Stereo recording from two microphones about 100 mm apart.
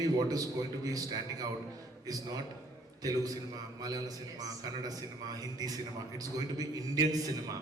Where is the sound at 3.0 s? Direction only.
40° right (ahead or behind).